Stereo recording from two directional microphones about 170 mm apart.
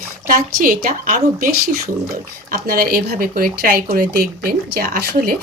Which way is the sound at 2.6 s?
60° right (ahead or behind).